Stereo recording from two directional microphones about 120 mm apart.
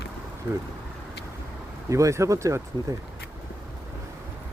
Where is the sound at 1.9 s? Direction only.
25° right (ahead or behind).